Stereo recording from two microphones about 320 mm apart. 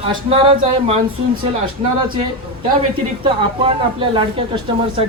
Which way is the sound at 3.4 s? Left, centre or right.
Centre.